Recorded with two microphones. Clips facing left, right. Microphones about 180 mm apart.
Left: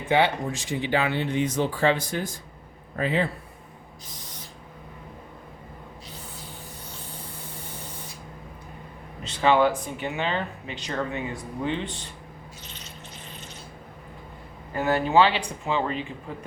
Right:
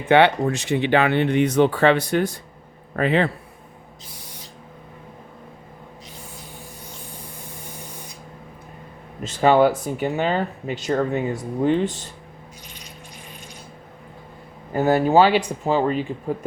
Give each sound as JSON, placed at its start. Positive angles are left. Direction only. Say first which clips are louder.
{"t": 0.1, "sound": "speech", "louder": "right 7 dB", "side_deg": -70}
{"t": 4.1, "sound": "spray", "louder": "right 1 dB", "side_deg": -10}
{"t": 9.2, "sound": "speech", "louder": "right 5 dB", "side_deg": -40}
{"t": 12.6, "sound": "a sound", "louder": "right 1 dB", "side_deg": -10}
{"t": 14.8, "sound": "speech", "louder": "right 5 dB", "side_deg": -40}